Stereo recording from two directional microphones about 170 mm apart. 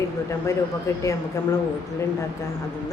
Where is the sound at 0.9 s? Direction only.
20° left (ahead or behind).